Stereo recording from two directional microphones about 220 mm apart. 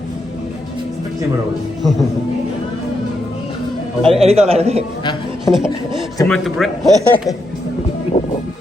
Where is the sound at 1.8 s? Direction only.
Centre (ahead or behind).